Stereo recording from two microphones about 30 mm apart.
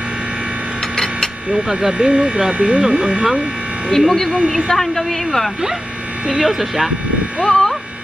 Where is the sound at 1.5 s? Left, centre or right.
Centre.